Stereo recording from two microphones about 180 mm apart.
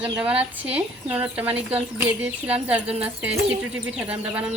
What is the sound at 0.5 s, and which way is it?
A woman's voice, 10° right (ahead or behind).